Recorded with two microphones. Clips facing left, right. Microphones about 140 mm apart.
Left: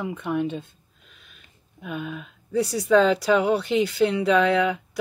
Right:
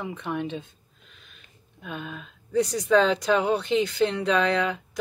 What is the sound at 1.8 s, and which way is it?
Speech, centre (ahead or behind).